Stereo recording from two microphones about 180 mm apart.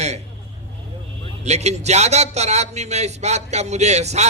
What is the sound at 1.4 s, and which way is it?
Speech, 40° right (ahead or behind).